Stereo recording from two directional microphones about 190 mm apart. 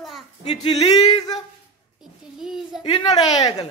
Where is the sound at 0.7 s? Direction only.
20° left (ahead or behind).